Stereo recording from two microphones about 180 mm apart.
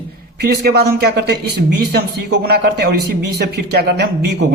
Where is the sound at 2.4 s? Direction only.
60° right (ahead or behind).